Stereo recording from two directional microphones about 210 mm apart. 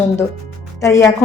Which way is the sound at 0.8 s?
15° left (ahead or behind).